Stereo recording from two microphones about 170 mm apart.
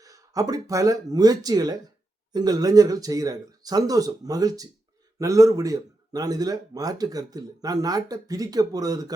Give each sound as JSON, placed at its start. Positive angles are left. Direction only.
{"t": 0.0, "sound": "speech", "side_deg": -20}